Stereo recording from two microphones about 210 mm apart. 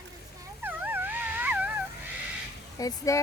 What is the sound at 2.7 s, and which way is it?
Speech, 15° left (ahead or behind).